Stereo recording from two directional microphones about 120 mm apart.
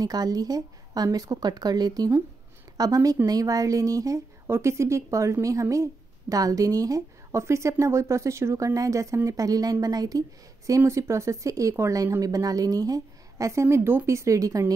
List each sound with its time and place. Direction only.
0.0 s a woman's voice: 30° right (ahead or behind)